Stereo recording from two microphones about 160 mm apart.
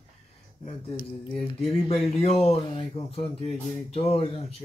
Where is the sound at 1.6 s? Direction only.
40° left (ahead or behind).